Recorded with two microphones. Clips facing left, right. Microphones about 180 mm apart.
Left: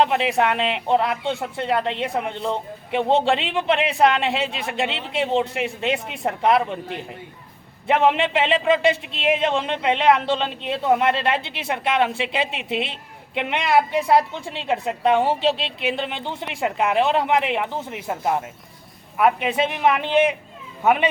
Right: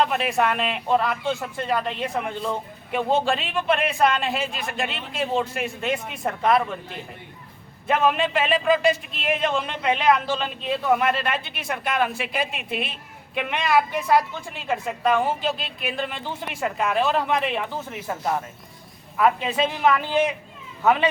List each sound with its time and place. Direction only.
0.0 s a man's voice: 25° left (ahead or behind)